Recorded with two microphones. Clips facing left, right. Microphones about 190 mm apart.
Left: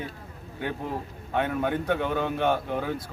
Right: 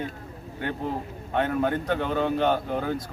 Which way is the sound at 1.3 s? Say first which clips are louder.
Right 2 dB; 5° left (ahead or behind).